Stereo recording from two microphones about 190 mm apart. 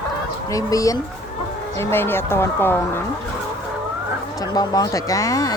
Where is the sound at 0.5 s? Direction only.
15° left (ahead or behind).